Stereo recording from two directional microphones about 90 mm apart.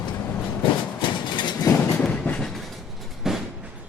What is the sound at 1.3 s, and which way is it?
Vehicle, 60° left (ahead or behind).